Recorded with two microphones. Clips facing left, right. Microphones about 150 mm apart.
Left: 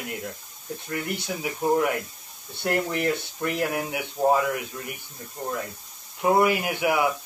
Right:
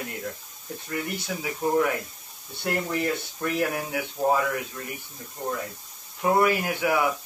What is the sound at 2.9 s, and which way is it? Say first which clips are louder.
Speech: left 1 dB; 15° left (ahead or behind).